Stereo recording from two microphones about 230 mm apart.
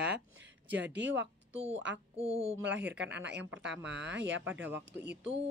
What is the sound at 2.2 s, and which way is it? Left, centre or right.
Speech, right.